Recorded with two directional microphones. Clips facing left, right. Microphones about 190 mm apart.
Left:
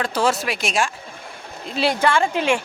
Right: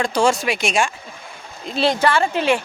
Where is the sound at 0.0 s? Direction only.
5° left (ahead or behind).